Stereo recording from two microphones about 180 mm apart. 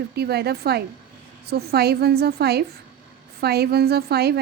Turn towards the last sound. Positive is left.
turn(degrees=-60)  # may be behind; listen again after turning